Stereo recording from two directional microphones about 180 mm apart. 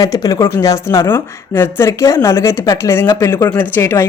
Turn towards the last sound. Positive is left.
turn(degrees=15)  # may be behind; listen again after turning